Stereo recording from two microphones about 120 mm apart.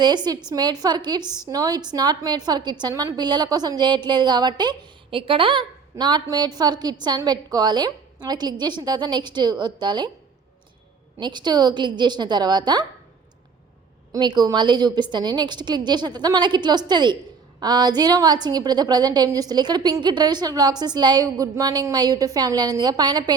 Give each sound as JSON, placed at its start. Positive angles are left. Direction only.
{"t": 0.5, "sound": "a woman's voice", "side_deg": -35}
{"t": 11.2, "sound": "a woman's voice", "side_deg": -40}
{"t": 14.1, "sound": "a woman's voice", "side_deg": -35}